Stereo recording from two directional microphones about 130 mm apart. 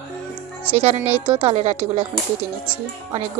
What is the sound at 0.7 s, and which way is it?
Speech, 55° right (ahead or behind).